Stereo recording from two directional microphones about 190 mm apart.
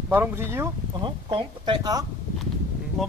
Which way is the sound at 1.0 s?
25° right (ahead or behind).